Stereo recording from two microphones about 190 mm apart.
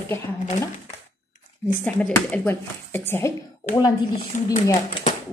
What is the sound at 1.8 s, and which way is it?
Speech, 5° left (ahead or behind).